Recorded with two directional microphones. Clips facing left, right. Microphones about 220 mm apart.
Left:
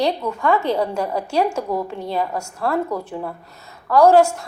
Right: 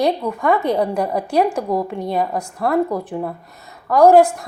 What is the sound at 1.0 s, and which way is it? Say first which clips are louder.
A woman's voice: right 3 dB; 15° right (ahead or behind).